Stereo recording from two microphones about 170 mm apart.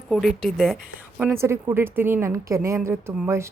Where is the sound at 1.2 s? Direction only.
15° right (ahead or behind).